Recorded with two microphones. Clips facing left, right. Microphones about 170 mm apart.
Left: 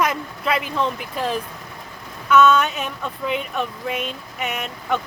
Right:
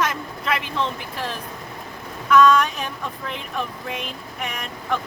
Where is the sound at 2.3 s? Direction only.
5° left (ahead or behind).